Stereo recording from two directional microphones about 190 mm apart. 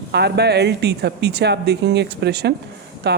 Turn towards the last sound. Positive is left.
turn(degrees=-60)  # may be behind; listen again after turning